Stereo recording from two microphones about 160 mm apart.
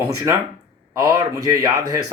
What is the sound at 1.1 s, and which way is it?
Speech, 25° right (ahead or behind).